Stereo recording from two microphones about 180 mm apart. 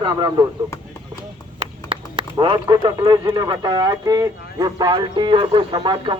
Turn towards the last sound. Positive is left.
turn(degrees=-25)  # may be behind; listen again after turning